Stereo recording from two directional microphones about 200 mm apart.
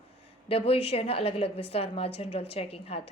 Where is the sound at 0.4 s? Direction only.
30° left (ahead or behind).